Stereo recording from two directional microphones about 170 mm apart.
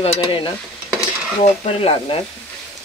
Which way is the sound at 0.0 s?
35° left (ahead or behind).